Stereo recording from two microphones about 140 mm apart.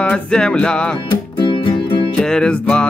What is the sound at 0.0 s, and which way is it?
Speech, 5° left (ahead or behind).